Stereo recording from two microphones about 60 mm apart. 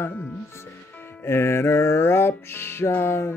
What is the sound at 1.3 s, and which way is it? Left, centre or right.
Music, left.